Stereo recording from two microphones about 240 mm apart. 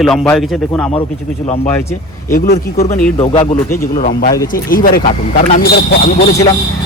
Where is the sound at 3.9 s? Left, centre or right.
Left.